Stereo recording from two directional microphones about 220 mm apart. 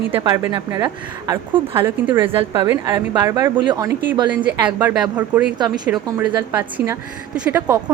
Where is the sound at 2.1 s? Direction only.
25° right (ahead or behind).